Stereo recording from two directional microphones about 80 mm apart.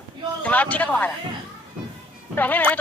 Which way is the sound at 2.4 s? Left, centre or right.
Left.